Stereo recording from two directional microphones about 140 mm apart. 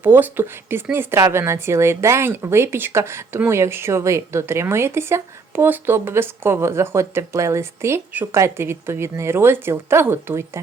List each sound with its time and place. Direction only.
0.0 s speech: 15° right (ahead or behind)